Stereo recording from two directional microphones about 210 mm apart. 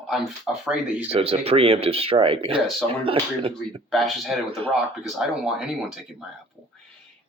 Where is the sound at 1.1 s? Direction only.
25° right (ahead or behind).